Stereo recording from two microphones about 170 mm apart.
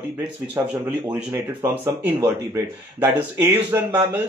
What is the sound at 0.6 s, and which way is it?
Speech, 15° right (ahead or behind).